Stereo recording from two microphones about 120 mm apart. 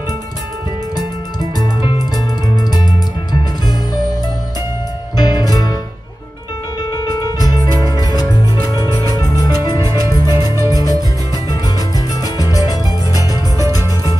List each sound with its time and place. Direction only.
5.1 s music: 35° left (ahead or behind)
6.8 s music: 35° left (ahead or behind)
10.0 s music: 30° left (ahead or behind)
12.4 s music: 30° left (ahead or behind)